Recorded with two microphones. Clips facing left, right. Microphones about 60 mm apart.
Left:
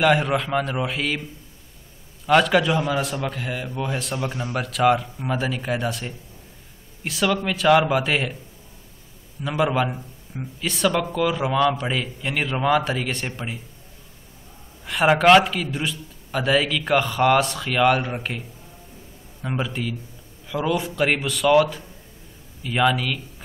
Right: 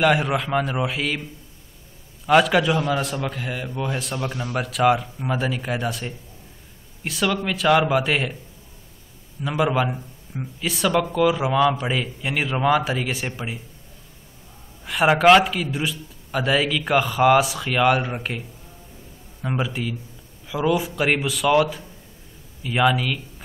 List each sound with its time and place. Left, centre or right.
0.0 s a man's voice: centre
2.2 s a man's voice: centre
4.2 s speech: centre
4.6 s a man's voice: centre
9.4 s a man's voice: centre
14.9 s a man's voice: centre
19.4 s a man's voice: centre